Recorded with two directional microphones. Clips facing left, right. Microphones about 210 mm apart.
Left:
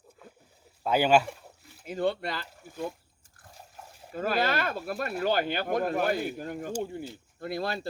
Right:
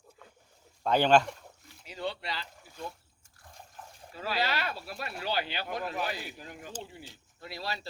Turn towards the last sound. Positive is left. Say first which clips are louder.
# left 7 dB
turn(degrees=50)  # may be behind; listen again after turning